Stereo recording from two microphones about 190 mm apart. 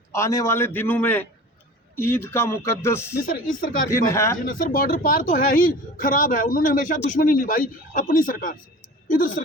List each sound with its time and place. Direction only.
0.1 s a man's voice: 15° left (ahead or behind)
3.5 s speech: 45° left (ahead or behind)
4.1 s a man's voice: 15° left (ahead or behind)
4.4 s speech: 45° left (ahead or behind)